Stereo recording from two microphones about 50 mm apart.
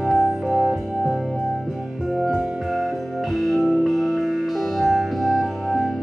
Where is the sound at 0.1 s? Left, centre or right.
Centre.